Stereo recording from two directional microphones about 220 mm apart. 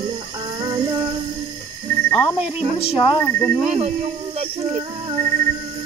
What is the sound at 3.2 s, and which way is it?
Speech, 10° left (ahead or behind).